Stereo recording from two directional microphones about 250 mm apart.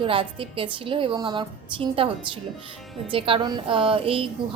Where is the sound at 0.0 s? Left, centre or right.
Right.